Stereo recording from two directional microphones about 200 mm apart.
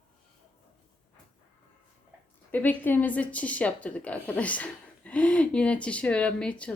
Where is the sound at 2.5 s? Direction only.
10° left (ahead or behind).